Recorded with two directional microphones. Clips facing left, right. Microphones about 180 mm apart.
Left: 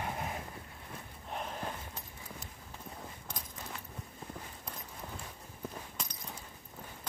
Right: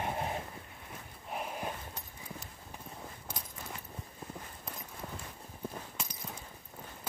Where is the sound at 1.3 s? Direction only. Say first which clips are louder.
Right 1 dB; 10° right (ahead or behind).